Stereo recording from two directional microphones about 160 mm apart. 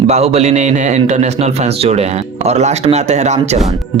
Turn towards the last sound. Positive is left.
turn(degrees=-45)  # may be behind; listen again after turning